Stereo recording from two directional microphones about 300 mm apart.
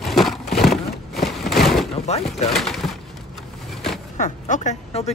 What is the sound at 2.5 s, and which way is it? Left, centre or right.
Speech, centre.